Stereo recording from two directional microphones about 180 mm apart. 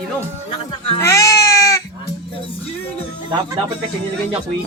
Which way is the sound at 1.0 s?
15° left (ahead or behind).